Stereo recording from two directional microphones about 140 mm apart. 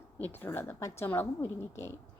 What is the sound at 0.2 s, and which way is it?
A woman's voice, 15° left (ahead or behind).